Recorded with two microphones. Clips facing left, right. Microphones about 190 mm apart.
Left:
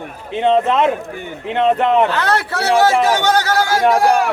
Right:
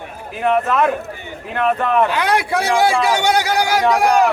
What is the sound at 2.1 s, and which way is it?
A man's voice, 15° right (ahead or behind).